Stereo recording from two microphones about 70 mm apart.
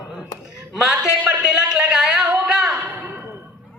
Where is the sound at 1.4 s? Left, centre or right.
Centre.